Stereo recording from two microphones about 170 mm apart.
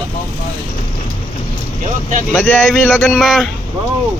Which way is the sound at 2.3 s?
5° left (ahead or behind).